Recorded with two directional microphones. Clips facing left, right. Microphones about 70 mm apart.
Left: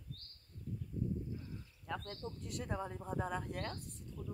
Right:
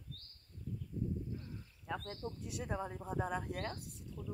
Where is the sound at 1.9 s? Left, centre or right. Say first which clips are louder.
Right 1 dB; centre.